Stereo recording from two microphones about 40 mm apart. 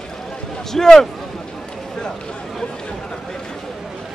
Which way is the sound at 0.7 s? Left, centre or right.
Centre.